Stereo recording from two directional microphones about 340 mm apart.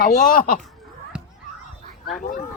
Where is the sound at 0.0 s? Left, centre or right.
Left.